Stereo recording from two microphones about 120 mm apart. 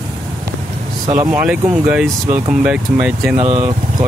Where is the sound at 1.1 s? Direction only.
20° right (ahead or behind).